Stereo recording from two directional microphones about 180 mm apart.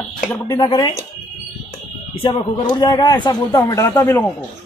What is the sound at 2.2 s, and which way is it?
Speech, 25° left (ahead or behind).